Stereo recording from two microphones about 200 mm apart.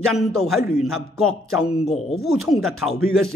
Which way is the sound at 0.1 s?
Centre (ahead or behind).